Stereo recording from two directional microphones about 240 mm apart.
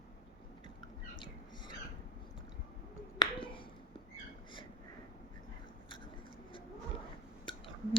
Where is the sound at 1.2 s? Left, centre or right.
Centre.